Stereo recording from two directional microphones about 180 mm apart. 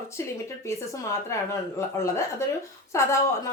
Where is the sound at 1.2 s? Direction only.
15° left (ahead or behind).